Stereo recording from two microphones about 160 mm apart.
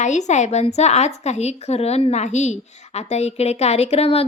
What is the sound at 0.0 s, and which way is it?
Speech, 45° left (ahead or behind).